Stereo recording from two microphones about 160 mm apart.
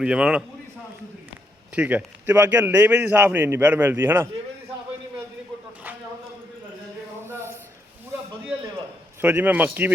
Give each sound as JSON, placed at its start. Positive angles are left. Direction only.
{"t": 0.0, "sound": "a man's voice", "side_deg": -5}
{"t": 1.7, "sound": "a man's voice", "side_deg": -5}
{"t": 7.3, "sound": "a sound", "side_deg": -15}
{"t": 9.2, "sound": "a man's voice", "side_deg": -10}